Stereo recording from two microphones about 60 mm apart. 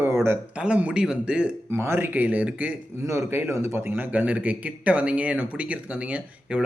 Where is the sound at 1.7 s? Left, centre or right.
Right.